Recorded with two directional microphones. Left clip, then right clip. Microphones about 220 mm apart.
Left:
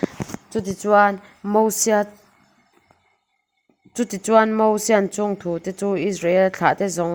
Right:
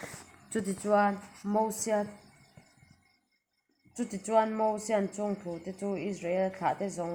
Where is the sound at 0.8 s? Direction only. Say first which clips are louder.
Left 12 dB; 50° left (ahead or behind).